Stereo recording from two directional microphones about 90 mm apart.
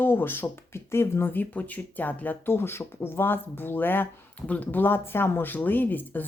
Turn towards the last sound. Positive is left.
turn(degrees=20)  # may be behind; listen again after turning